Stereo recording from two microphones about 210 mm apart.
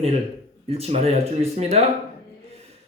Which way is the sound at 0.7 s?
30° right (ahead or behind).